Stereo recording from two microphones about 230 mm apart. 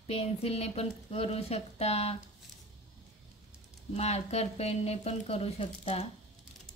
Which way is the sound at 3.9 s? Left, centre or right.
Left.